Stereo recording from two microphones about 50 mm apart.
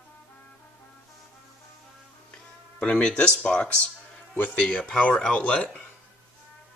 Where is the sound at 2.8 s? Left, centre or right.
Left.